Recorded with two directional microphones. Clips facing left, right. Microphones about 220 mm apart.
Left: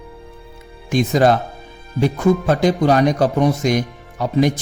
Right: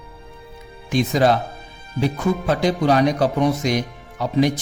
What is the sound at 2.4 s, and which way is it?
Speech, 50° left (ahead or behind).